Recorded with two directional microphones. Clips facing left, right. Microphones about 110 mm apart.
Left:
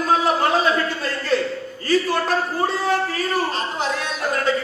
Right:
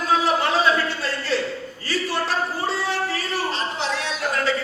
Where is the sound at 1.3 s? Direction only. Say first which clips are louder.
Left 6 dB; 45° left (ahead or behind).